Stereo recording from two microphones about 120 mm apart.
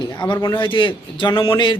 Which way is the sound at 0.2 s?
40° left (ahead or behind).